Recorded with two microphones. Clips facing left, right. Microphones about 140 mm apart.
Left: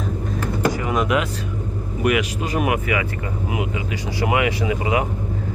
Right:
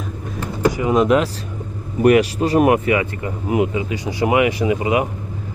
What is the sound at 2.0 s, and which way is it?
Speech, 40° right (ahead or behind).